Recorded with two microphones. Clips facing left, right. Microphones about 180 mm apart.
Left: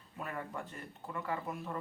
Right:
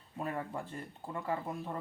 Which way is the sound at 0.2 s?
30° right (ahead or behind).